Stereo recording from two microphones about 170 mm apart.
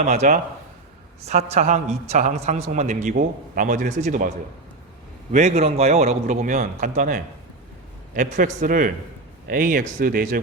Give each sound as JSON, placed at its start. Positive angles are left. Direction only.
{"t": 0.0, "sound": "a man's voice", "side_deg": -40}
{"t": 5.3, "sound": "a man's voice", "side_deg": -40}